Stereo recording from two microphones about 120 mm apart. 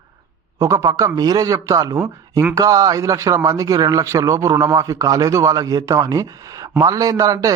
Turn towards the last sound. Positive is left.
turn(degrees=-30)  # may be behind; listen again after turning